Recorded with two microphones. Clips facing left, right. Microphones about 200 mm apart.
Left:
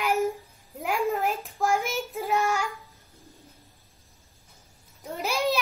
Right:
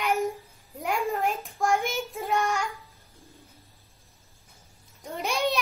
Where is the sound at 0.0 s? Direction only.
Centre (ahead or behind).